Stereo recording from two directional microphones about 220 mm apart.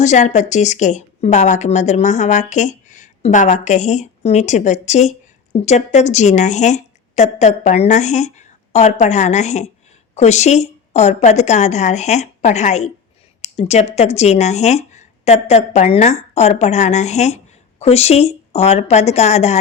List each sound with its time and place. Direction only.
0.0 s speech: 35° left (ahead or behind)